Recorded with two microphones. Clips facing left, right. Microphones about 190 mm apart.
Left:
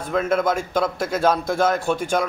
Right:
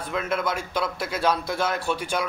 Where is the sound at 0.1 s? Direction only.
50° left (ahead or behind).